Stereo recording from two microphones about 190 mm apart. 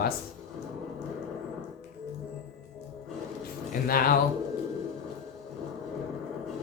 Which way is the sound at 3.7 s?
50° left (ahead or behind).